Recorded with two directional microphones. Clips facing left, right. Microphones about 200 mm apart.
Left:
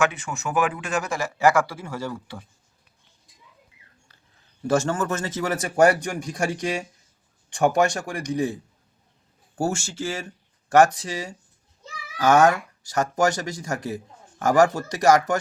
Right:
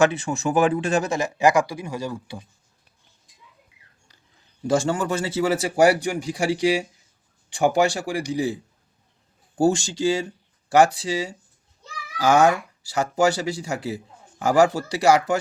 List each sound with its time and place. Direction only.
0.0 s speech: 30° right (ahead or behind); by 2.5 s 15° right (ahead or behind)
4.6 s speech: 10° right (ahead or behind)
9.6 s speech: 15° right (ahead or behind)